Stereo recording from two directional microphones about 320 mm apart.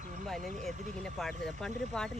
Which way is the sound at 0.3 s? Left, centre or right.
Right.